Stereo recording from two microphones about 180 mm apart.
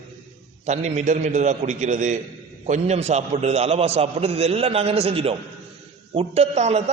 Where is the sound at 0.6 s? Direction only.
40° right (ahead or behind).